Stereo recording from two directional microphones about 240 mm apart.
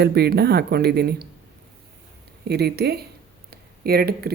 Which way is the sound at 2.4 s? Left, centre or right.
Right.